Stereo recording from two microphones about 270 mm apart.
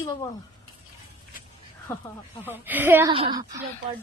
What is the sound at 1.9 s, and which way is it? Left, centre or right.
Speech, centre.